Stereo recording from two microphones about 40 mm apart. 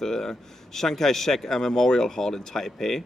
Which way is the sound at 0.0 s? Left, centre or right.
Centre.